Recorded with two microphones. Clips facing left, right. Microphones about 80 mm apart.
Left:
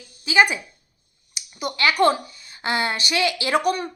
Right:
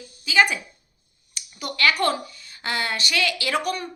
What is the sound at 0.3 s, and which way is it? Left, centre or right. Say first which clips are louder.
A woman's voice: left 2 dB; centre.